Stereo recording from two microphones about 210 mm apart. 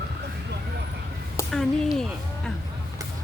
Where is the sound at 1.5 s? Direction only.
Centre (ahead or behind).